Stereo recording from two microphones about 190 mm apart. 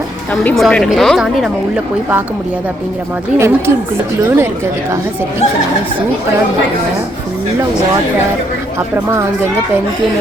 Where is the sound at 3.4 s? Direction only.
15° right (ahead or behind).